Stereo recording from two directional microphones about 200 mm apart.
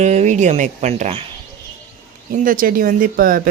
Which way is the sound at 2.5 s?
45° right (ahead or behind).